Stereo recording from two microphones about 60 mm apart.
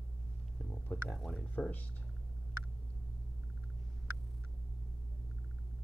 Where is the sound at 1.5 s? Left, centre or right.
Left.